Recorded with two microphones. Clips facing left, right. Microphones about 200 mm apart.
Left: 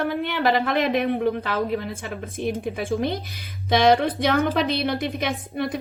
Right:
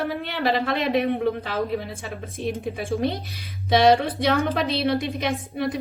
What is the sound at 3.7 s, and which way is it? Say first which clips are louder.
A woman's voice: even; 50° left (ahead or behind).